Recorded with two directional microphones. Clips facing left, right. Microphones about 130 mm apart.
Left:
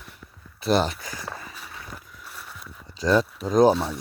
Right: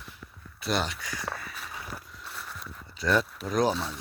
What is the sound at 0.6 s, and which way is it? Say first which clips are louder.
Speech: left 7 dB; 35° left (ahead or behind).